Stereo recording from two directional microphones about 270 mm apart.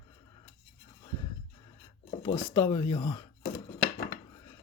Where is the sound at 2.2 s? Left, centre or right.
Centre.